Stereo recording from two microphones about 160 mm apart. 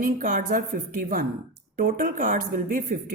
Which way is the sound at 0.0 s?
60° right (ahead or behind).